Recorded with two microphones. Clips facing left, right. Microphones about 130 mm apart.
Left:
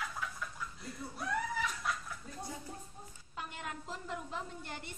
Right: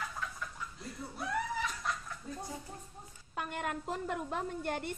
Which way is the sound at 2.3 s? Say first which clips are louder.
Right 5 dB; 20° right (ahead or behind).